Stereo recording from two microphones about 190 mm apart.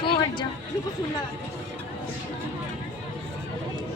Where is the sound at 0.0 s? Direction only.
25° left (ahead or behind).